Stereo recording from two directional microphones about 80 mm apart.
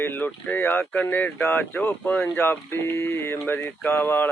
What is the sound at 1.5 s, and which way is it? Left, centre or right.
Speech, left.